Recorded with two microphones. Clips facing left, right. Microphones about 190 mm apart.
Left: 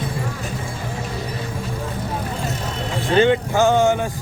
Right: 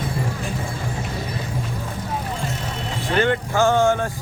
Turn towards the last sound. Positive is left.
turn(degrees=15)  # may be behind; listen again after turning